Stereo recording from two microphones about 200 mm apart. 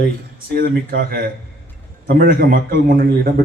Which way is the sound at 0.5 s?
45° right (ahead or behind).